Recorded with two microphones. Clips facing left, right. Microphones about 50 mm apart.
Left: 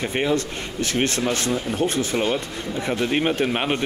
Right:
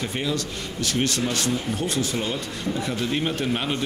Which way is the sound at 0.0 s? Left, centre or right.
Left.